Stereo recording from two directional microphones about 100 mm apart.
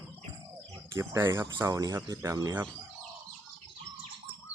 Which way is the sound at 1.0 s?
25° right (ahead or behind).